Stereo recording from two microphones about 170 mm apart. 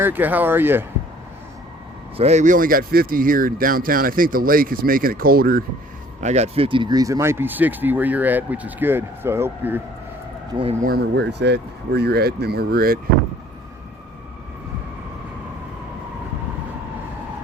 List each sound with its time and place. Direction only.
0.0 s speech: 10° right (ahead or behind)
2.1 s speech: 40° right (ahead or behind); by 5.6 s 60° right (ahead or behind)
6.1 s speech: 40° right (ahead or behind); by 9.8 s 15° right (ahead or behind)
10.5 s speech: 25° right (ahead or behind)
10.8 s speech: 70° right (ahead or behind)